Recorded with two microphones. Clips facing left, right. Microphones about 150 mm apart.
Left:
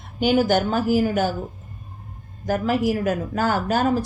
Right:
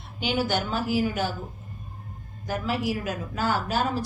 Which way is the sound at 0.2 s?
45° left (ahead or behind).